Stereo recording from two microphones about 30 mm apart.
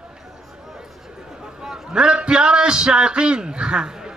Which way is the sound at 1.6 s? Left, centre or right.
Centre.